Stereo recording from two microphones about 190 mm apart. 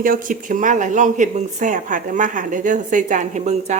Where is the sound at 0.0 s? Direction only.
45° right (ahead or behind).